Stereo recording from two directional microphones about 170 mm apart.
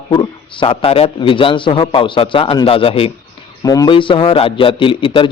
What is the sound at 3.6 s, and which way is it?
A man's voice, 20° left (ahead or behind).